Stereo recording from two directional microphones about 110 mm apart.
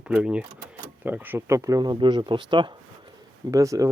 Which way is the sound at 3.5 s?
30° right (ahead or behind).